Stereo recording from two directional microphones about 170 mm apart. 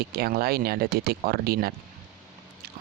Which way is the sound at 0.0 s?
65° right (ahead or behind).